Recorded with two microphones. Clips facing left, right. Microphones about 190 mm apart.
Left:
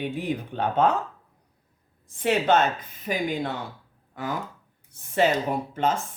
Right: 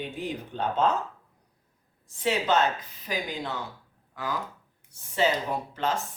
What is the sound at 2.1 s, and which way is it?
A woman's voice, 55° left (ahead or behind).